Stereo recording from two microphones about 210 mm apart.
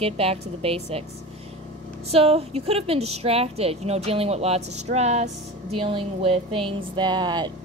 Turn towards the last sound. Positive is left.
turn(degrees=-20)  # may be behind; listen again after turning